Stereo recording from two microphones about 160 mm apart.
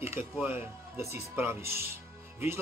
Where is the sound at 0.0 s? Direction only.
15° right (ahead or behind).